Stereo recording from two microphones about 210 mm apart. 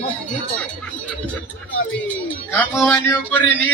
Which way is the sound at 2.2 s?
10° left (ahead or behind).